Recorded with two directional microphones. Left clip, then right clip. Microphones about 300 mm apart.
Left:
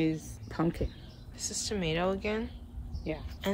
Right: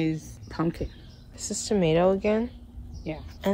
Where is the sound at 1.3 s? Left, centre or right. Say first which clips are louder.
Right 8 dB; centre.